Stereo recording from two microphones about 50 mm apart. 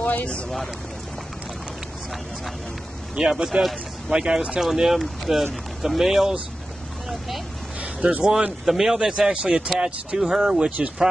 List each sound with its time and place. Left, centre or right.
0.0 s boat: left
3.2 s speech: centre
4.6 s speech: centre
7.8 s a sound: right
8.3 s speech: right
8.6 s speech: centre